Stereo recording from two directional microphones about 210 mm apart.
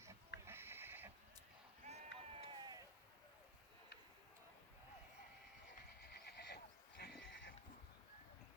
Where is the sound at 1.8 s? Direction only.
30° right (ahead or behind).